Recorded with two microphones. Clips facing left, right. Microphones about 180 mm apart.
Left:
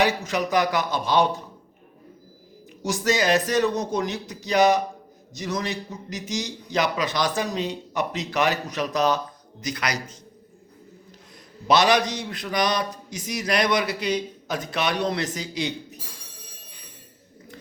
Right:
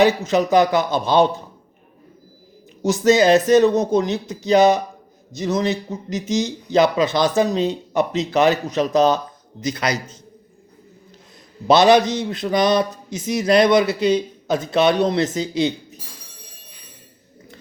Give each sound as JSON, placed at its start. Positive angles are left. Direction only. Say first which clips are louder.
{"t": 0.0, "sound": "speech", "louder": "right 7 dB", "side_deg": -25}
{"t": 2.8, "sound": "speech", "louder": "right 8 dB", "side_deg": -25}
{"t": 11.7, "sound": "speech", "louder": "right 6 dB", "side_deg": -25}